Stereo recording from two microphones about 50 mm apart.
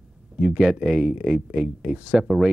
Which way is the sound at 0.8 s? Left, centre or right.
Centre.